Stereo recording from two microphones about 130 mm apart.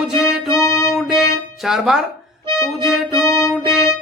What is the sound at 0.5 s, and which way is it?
Music, 25° left (ahead or behind).